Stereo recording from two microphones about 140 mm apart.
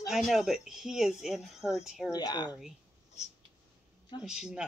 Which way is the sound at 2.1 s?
30° left (ahead or behind).